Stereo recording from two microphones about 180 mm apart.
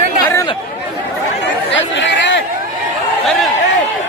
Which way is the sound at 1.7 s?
90° left.